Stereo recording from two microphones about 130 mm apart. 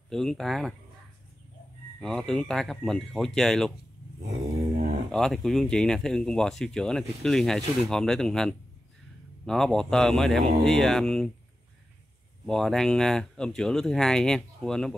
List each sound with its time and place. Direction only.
0.1 s speech: 5° left (ahead or behind)
2.0 s speech: 5° left (ahead or behind)
4.2 s a sound: 55° right (ahead or behind)
5.1 s speech: 5° left (ahead or behind)
12.4 s speech: 5° left (ahead or behind)